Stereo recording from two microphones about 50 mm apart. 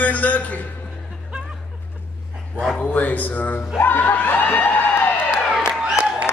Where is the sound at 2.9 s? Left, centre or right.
Left.